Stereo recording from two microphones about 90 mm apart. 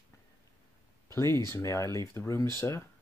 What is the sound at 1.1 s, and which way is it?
Speech, 35° left (ahead or behind).